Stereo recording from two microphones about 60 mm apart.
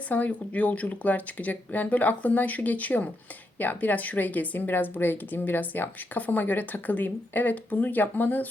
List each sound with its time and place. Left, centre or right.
0.1 s a woman's voice: left